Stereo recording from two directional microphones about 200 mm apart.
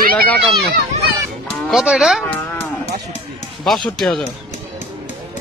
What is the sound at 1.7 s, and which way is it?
Speech, centre (ahead or behind).